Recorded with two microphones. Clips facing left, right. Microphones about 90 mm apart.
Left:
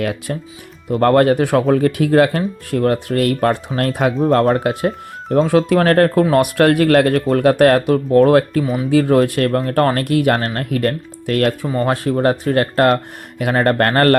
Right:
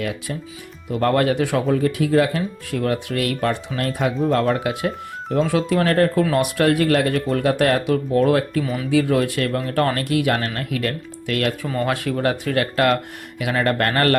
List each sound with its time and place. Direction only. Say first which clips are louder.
0.0 s speech: left 5 dB; 55° left (ahead or behind)
0.9 s speech: left 6 dB; 45° left (ahead or behind)
4.2 s speech: left 5 dB; 40° left (ahead or behind)